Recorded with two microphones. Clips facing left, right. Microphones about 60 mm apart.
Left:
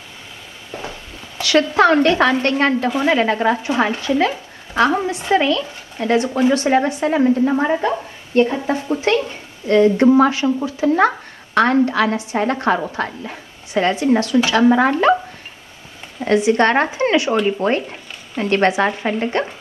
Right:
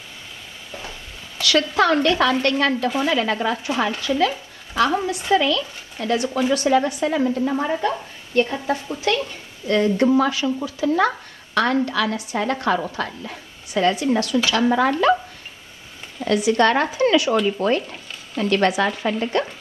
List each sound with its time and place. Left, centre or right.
1.4 s speech: left
16.3 s speech: left